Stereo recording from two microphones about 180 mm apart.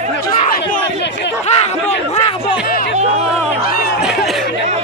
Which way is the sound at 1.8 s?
40° left (ahead or behind).